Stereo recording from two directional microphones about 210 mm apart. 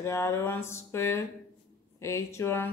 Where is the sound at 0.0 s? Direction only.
15° left (ahead or behind).